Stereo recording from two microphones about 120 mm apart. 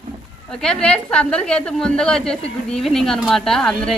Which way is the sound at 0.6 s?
5° left (ahead or behind).